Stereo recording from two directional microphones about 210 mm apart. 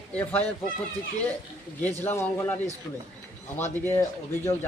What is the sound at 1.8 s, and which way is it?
Speech, 10° left (ahead or behind).